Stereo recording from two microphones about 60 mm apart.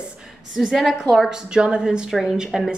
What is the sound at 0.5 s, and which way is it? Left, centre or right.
Speech, centre.